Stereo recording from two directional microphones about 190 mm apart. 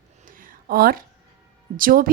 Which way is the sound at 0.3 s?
45° right (ahead or behind).